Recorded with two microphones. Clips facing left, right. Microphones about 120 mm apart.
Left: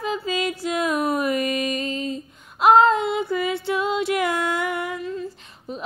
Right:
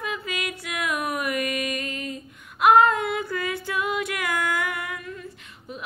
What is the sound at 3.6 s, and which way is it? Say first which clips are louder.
Female singing: left 5 dB; 25° left (ahead or behind).